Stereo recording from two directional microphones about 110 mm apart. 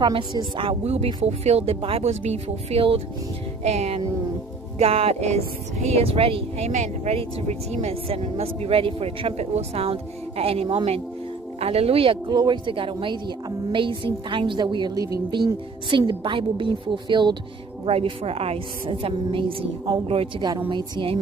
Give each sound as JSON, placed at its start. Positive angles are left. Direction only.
{"t": 0.0, "sound": "a woman's voice", "side_deg": -45}
{"t": 0.8, "sound": "speech", "side_deg": -75}
{"t": 3.6, "sound": "music", "side_deg": -80}
{"t": 4.7, "sound": "speech", "side_deg": -65}
{"t": 9.4, "sound": "speech", "side_deg": -80}
{"t": 12.3, "sound": "a woman's voice", "side_deg": -45}
{"t": 17.8, "sound": "a woman's voice", "side_deg": -65}